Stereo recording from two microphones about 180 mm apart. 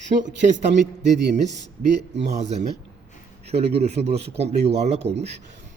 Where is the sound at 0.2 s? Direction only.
40° right (ahead or behind).